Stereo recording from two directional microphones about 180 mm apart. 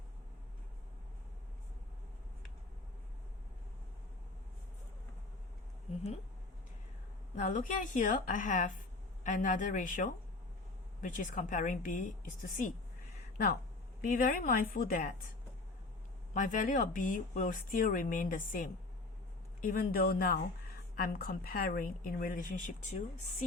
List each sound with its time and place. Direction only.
7.3 s speech: 45° left (ahead or behind)
14.0 s speech: 50° left (ahead or behind)
16.3 s speech: 45° left (ahead or behind)